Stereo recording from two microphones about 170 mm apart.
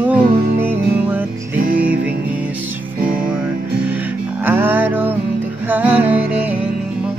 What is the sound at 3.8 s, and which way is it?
Music, 10° right (ahead or behind).